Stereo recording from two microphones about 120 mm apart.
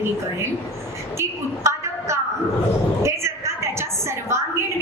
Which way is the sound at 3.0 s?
25° right (ahead or behind).